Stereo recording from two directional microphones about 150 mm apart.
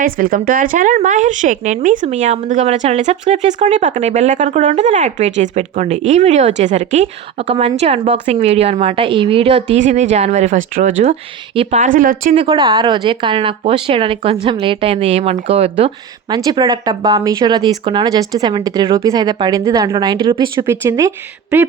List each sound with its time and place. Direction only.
0.0 s speech: 70° right (ahead or behind); by 11.8 s 40° right (ahead or behind)
11.8 s speech: 60° right (ahead or behind)
12.3 s speech: 40° right (ahead or behind)
16.3 s speech: 30° right (ahead or behind)